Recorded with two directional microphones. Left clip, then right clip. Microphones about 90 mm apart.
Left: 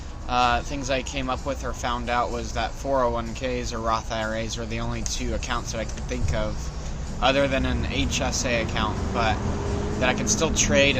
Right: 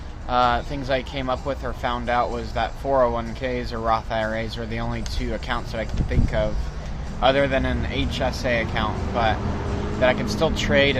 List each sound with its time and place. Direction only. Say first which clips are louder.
0.3 s speech: right 2 dB; 45° right (ahead or behind)